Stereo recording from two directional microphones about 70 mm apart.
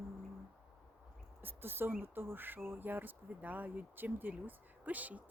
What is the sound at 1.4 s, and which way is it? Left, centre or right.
Speech, right.